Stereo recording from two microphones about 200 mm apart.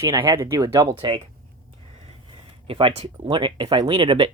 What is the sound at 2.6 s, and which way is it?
Speech, 25° right (ahead or behind).